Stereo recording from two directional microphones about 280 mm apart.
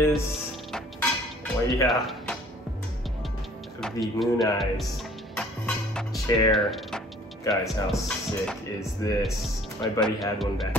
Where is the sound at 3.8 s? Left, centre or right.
Centre.